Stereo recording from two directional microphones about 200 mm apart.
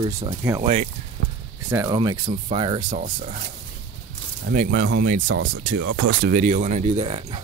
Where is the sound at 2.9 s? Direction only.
40° right (ahead or behind).